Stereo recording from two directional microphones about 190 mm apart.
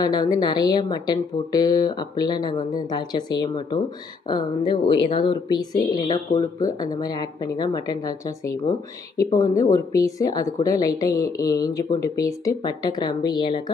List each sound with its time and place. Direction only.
0.0 s speech: 20° left (ahead or behind)